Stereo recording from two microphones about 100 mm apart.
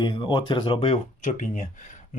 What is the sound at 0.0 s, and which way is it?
Speech, 50° left (ahead or behind).